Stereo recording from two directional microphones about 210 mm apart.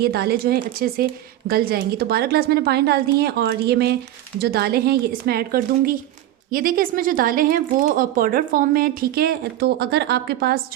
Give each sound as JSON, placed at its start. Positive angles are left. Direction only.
{"t": 0.0, "sound": "speech", "side_deg": -50}